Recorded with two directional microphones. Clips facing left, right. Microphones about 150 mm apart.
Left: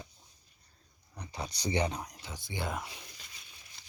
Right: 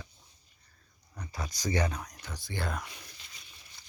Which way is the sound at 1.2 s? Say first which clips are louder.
Even; 20° left (ahead or behind).